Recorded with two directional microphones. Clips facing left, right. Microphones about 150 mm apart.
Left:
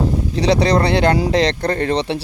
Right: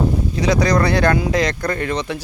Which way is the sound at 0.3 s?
30° left (ahead or behind).